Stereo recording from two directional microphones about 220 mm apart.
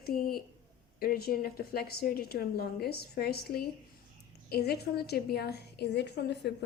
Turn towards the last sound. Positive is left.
turn(degrees=50)  # may be behind; listen again after turning